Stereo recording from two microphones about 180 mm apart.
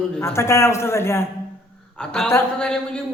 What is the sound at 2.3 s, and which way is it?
Speech, 5° left (ahead or behind).